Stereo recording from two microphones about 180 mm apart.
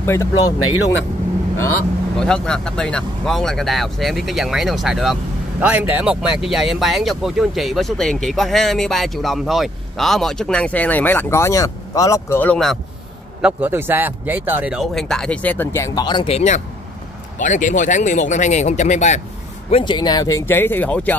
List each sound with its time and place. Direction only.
0.0 s speech: 15° left (ahead or behind)
2.1 s speech: 5° left (ahead or behind)
13.4 s speech: 10° right (ahead or behind); by 19.2 s 40° left (ahead or behind)
19.7 s speech: 25° left (ahead or behind); by 21.1 s 10° left (ahead or behind)